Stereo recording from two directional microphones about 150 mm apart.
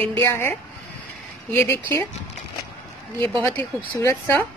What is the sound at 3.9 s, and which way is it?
Speech, 20° left (ahead or behind).